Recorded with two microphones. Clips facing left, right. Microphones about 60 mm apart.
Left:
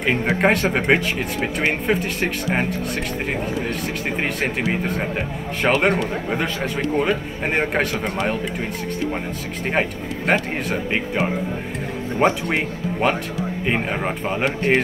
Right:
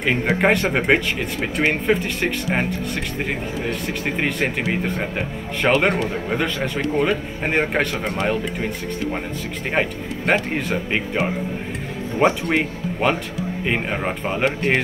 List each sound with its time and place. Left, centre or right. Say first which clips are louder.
0.0 s speech: even; centre
3.7 s speech: even; centre
9.7 s speech: even; centre
12.4 s speech: right 1 dB; centre